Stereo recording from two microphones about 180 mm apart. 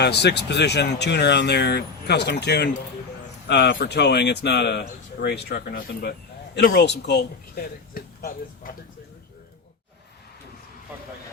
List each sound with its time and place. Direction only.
0.0 s speech: 65° left (ahead or behind)